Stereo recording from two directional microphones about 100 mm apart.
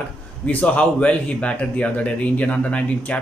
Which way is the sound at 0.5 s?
15° left (ahead or behind).